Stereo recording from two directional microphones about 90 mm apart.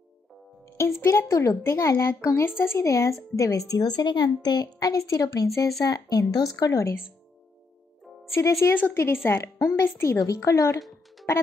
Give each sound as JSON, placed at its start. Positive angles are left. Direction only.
{"t": 1.0, "sound": "speech", "side_deg": 35}
{"t": 8.4, "sound": "speech", "side_deg": 35}
{"t": 10.8, "sound": "music", "side_deg": 0}